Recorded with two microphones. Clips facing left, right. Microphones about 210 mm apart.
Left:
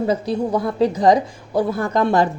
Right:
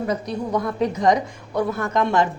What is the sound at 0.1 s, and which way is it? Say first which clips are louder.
Speech: left 4 dB; 30° left (ahead or behind).